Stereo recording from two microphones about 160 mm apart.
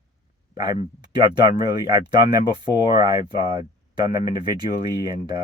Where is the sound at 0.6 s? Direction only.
25° right (ahead or behind).